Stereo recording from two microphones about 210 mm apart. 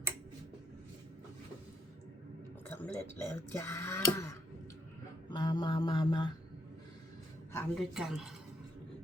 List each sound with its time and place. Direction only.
2.6 s speech: 10° left (ahead or behind)
5.3 s mantra: 20° left (ahead or behind)
7.5 s a man's voice: centre (ahead or behind)